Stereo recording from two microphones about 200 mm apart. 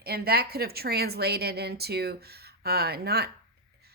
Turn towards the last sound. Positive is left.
turn(degrees=-50)  # may be behind; listen again after turning